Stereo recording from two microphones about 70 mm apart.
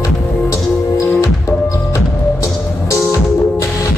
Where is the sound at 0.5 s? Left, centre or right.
Left.